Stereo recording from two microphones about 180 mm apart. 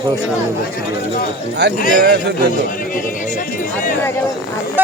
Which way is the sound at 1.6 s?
70° right (ahead or behind).